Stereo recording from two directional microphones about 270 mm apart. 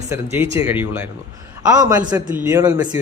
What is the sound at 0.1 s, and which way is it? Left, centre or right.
A man's voice, centre.